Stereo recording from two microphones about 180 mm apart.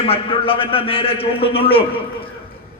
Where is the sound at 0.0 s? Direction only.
30° left (ahead or behind).